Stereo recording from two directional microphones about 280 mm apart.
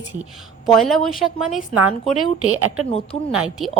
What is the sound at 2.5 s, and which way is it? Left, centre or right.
Speech, right.